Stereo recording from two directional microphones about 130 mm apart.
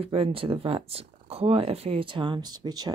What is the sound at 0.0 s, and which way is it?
Speech, 45° right (ahead or behind).